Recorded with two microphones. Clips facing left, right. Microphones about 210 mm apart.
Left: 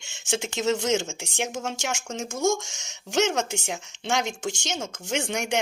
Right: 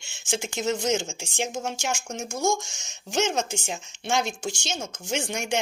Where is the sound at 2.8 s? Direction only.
70° left (ahead or behind).